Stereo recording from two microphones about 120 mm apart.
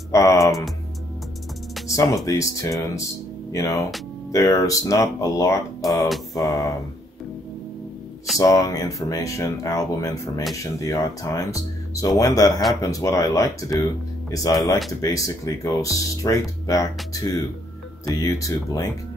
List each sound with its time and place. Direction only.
0.1 s speech: 30° left (ahead or behind)
2.2 s speech: 25° left (ahead or behind)
8.4 s speech: 30° left (ahead or behind)